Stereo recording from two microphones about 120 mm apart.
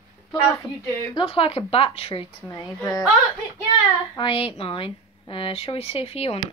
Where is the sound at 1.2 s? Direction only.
50° left (ahead or behind).